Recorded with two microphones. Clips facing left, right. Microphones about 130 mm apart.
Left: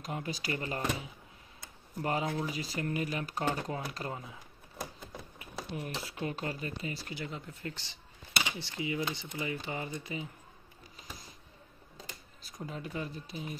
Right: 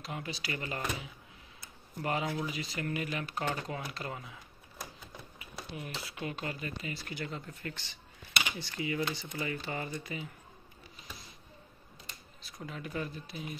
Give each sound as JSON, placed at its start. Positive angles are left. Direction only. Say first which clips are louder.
{"t": 0.0, "sound": "speech", "louder": "left 2 dB", "side_deg": 40}
{"t": 5.4, "sound": "speech", "louder": "left 3 dB", "side_deg": 40}
{"t": 7.2, "sound": "speech", "louder": "right 1 dB", "side_deg": 15}
{"t": 8.5, "sound": "speech", "louder": "right 1 dB", "side_deg": 25}
{"t": 12.4, "sound": "speech", "louder": "left 2 dB", "side_deg": 35}